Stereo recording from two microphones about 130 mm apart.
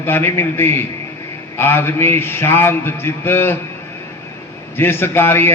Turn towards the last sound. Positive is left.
turn(degrees=15)  # may be behind; listen again after turning